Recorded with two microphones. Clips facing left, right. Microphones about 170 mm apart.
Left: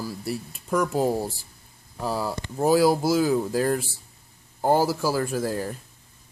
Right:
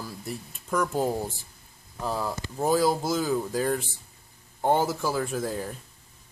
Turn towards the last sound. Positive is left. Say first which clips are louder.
# left 3 dB
turn(degrees=5)  # may be behind; listen again after turning